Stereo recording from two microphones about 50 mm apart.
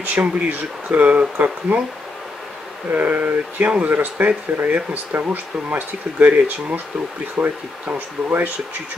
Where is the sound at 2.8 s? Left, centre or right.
Right.